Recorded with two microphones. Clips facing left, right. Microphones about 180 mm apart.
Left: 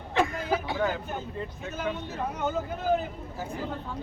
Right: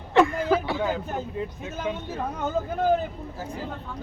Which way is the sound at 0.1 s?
65° right (ahead or behind).